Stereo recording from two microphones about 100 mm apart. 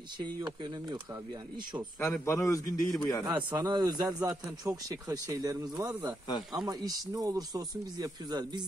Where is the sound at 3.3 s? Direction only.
45° right (ahead or behind).